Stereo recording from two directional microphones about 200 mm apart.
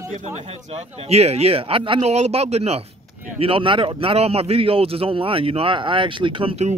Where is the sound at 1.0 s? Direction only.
30° right (ahead or behind).